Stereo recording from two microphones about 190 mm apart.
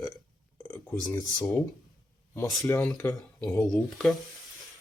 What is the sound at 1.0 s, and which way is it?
Speech, 5° left (ahead or behind).